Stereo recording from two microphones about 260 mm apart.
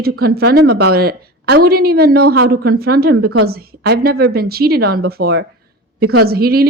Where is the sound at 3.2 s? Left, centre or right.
Right.